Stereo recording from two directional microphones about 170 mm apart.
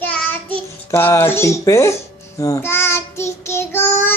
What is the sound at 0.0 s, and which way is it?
A child's voice, 10° left (ahead or behind).